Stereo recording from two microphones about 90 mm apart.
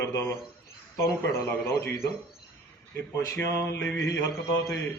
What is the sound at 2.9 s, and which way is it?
Speech, 35° left (ahead or behind).